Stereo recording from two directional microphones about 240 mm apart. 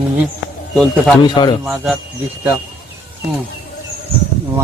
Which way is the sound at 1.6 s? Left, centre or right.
Centre.